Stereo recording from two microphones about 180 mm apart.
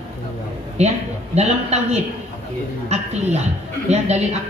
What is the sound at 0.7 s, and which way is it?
A woman's voice, 40° right (ahead or behind).